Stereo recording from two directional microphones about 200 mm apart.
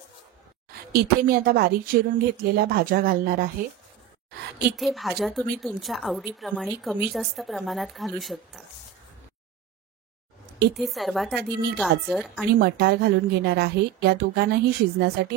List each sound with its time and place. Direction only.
0.9 s a woman's voice: 50° right (ahead or behind)
4.7 s a woman's voice: centre (ahead or behind)
10.8 s a woman's voice: centre (ahead or behind)
12.5 s a woman's voice: 55° right (ahead or behind)